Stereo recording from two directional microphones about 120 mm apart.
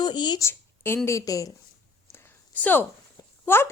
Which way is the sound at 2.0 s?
20° left (ahead or behind).